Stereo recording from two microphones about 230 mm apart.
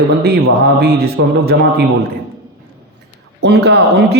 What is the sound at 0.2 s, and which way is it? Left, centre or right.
A man's voice, right.